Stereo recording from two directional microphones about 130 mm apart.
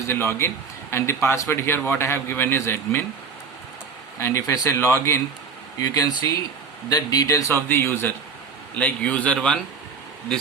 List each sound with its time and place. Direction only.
0.1 s a man's voice: 20° left (ahead or behind)
4.2 s a man's voice: 20° left (ahead or behind)